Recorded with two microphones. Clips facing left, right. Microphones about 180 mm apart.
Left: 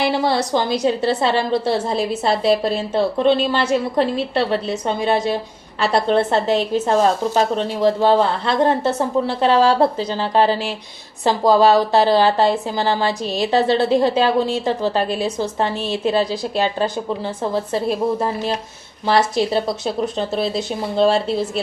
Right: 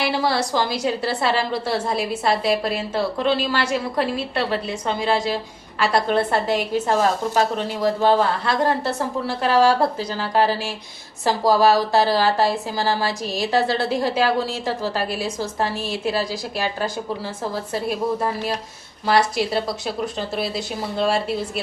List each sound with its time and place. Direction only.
0.0 s a woman's voice: 25° left (ahead or behind)
19.0 s a woman's voice: 25° left (ahead or behind)